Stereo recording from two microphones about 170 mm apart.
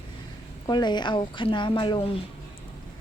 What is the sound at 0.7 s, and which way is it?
Speech, 25° left (ahead or behind).